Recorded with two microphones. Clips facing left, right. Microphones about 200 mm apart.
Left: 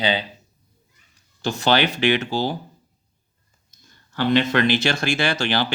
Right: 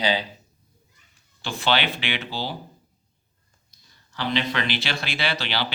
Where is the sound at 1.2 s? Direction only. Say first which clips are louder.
Left 7 dB; 45° left (ahead or behind).